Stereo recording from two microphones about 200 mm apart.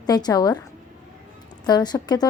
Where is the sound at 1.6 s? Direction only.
20° left (ahead or behind).